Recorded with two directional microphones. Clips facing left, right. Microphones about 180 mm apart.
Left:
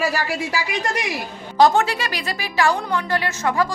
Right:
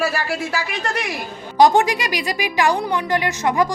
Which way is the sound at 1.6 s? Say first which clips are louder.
Right 2 dB; 15° right (ahead or behind).